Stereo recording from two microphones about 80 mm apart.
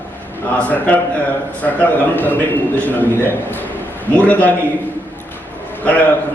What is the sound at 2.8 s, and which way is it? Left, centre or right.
A man's voice, left.